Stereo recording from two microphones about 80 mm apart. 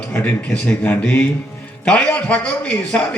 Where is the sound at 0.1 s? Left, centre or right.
Centre.